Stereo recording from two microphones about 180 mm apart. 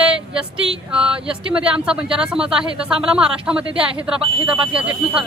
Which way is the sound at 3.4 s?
5° right (ahead or behind).